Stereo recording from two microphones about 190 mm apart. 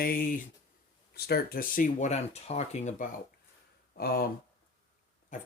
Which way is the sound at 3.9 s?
50° left (ahead or behind).